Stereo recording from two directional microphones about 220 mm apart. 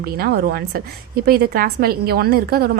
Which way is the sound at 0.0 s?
45° right (ahead or behind).